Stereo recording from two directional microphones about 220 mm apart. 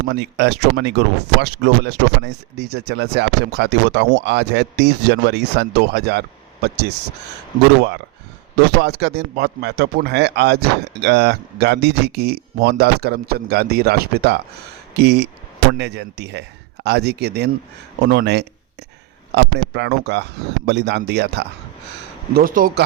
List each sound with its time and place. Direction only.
0.1 s speech: 50° right (ahead or behind)
8.8 s a man's voice: 50° right (ahead or behind)